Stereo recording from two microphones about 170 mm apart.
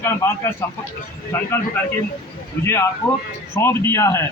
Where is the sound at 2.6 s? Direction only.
15° left (ahead or behind).